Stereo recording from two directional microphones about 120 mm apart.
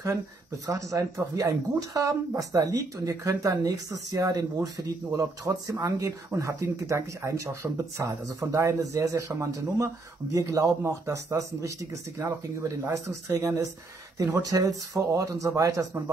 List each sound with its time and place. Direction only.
0.7 s speech: 25° right (ahead or behind)